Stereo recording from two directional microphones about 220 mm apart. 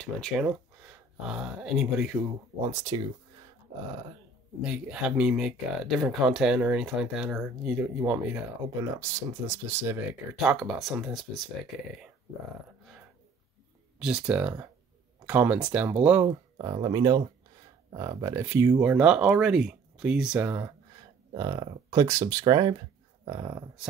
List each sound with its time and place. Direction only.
0.0 s speech: centre (ahead or behind)
2.9 s speech: 20° right (ahead or behind)
4.6 s speech: 5° right (ahead or behind)
13.9 s speech: 5° right (ahead or behind)
16.3 s speech: 20° right (ahead or behind)
21.3 s speech: 20° right (ahead or behind)